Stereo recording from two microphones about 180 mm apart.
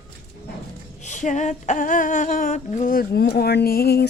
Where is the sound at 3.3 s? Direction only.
60° left (ahead or behind).